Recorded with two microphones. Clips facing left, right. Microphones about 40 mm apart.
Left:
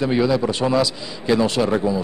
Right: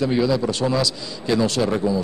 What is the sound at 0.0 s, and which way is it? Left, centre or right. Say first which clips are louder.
A man's voice: left 1 dB; centre.